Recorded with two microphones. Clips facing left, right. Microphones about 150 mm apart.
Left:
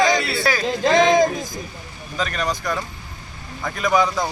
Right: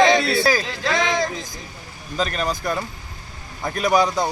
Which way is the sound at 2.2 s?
30° right (ahead or behind).